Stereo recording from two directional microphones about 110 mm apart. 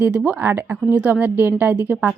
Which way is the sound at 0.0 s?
15° right (ahead or behind).